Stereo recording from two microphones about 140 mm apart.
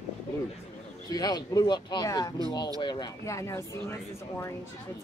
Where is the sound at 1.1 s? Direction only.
30° left (ahead or behind).